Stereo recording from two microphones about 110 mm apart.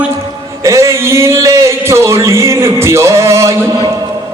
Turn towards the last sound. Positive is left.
turn(degrees=-25)  # may be behind; listen again after turning